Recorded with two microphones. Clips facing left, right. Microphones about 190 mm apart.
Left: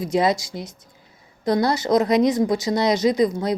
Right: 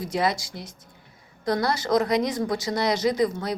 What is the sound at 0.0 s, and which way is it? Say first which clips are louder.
Speech: left 5 dB; 20° left (ahead or behind).